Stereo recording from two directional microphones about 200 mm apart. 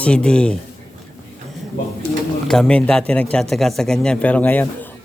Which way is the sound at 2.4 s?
5° left (ahead or behind).